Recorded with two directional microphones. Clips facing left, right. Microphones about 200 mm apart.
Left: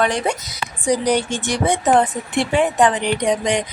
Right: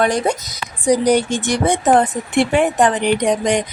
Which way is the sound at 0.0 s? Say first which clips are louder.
Right 3 dB; 40° right (ahead or behind).